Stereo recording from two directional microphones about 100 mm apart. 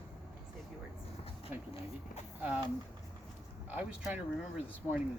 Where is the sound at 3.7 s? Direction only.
15° right (ahead or behind).